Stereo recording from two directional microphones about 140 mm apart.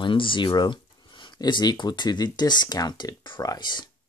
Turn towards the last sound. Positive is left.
turn(degrees=30)  # may be behind; listen again after turning